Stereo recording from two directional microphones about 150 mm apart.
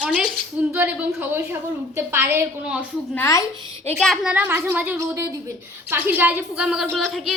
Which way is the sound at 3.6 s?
35° right (ahead or behind).